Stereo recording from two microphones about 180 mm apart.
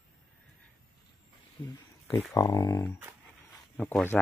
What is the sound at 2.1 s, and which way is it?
Speech, 20° left (ahead or behind).